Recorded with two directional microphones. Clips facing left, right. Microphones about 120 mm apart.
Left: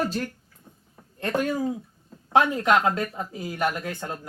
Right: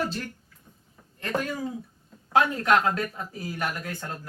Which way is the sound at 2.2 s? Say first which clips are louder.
Left 2 dB; 20° left (ahead or behind).